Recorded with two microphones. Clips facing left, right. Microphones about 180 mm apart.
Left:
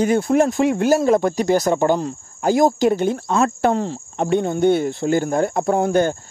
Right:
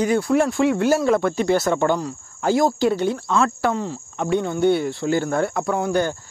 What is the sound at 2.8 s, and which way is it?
Speech, 50° left (ahead or behind).